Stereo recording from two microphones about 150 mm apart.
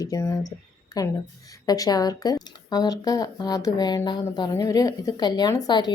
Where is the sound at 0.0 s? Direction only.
20° left (ahead or behind).